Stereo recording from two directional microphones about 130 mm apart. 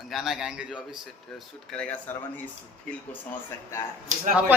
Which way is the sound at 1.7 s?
10° left (ahead or behind).